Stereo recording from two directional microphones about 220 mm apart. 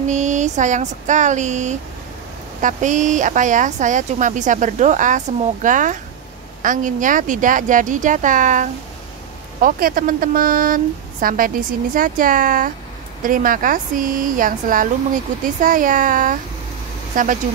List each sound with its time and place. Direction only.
0.0 s speech: 35° right (ahead or behind)